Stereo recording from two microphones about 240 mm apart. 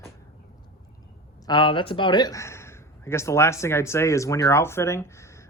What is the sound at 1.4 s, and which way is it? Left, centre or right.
Speech, centre.